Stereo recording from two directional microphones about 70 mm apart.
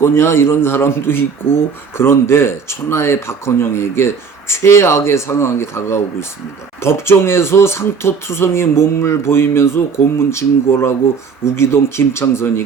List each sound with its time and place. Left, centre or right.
0.0 s speech: left